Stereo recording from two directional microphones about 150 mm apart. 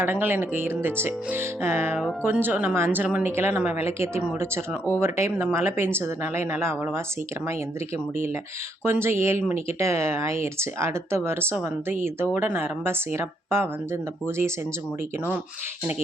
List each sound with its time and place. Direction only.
0.0 s speech: 15° right (ahead or behind)
8.8 s speech: 15° right (ahead or behind)